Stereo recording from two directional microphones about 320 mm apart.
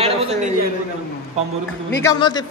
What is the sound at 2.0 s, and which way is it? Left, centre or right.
Speech, centre.